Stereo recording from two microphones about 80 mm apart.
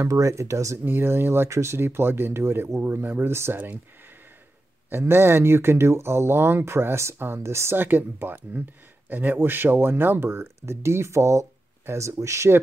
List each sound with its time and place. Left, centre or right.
0.0 s speech: right
0.8 s speech: right
4.8 s speech: right